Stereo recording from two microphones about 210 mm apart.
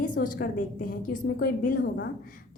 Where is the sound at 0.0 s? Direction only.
40° left (ahead or behind).